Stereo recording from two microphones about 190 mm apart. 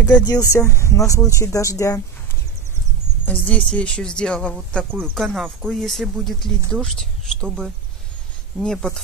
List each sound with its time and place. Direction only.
0.1 s speech: 20° left (ahead or behind)
3.3 s speech: 5° left (ahead or behind)